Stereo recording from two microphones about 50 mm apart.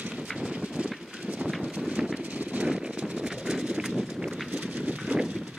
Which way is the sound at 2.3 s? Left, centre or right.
Right.